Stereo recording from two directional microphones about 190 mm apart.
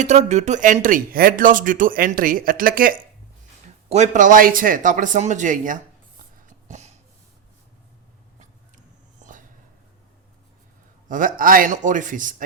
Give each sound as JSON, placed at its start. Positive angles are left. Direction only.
{"t": 0.0, "sound": "speech", "side_deg": -35}
{"t": 3.8, "sound": "speech", "side_deg": -35}
{"t": 6.4, "sound": "a sound", "side_deg": -40}
{"t": 11.1, "sound": "speech", "side_deg": -45}